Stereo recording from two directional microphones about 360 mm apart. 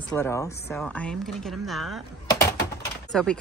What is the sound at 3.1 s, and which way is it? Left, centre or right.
Speech, centre.